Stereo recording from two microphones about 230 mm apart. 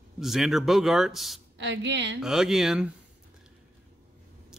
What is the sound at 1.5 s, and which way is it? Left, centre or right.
Speech, right.